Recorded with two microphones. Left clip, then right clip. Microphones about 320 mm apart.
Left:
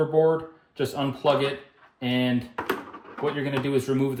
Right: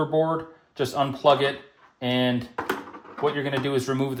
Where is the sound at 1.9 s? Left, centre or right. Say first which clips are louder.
Right 2 dB; centre.